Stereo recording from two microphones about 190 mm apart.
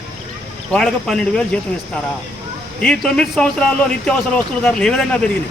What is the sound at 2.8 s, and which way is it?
Speech, 5° left (ahead or behind).